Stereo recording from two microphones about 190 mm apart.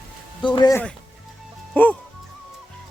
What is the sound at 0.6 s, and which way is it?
Speech, 20° left (ahead or behind).